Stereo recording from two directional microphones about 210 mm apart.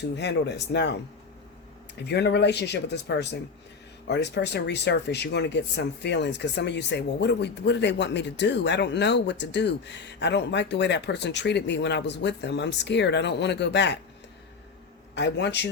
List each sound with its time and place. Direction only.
0.2 s speech: 55° left (ahead or behind)
2.0 s speech: 55° left (ahead or behind)
15.1 s speech: 55° left (ahead or behind)